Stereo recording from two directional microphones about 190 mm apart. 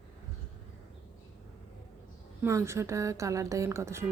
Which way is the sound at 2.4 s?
15° right (ahead or behind).